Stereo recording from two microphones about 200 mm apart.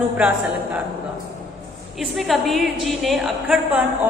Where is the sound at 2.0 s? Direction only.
Centre (ahead or behind).